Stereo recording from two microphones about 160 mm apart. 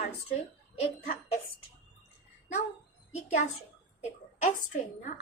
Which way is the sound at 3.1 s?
45° left (ahead or behind).